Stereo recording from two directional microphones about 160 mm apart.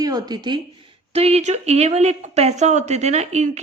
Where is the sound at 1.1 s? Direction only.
40° right (ahead or behind).